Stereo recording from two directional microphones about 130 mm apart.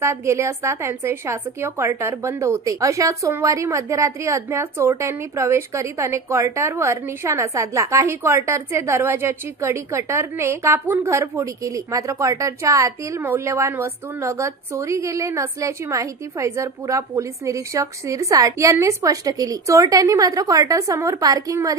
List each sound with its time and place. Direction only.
0.0 s a woman's voice: 20° right (ahead or behind)